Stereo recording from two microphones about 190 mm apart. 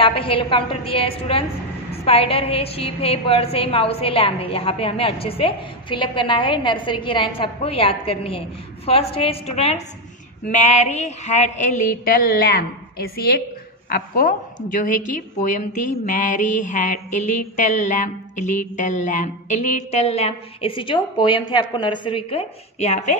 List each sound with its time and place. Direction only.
0.0 s a woman's voice: 30° left (ahead or behind)
10.4 s a sound: 40° left (ahead or behind)
13.8 s a woman's voice: 50° left (ahead or behind); by 23.1 s 35° left (ahead or behind)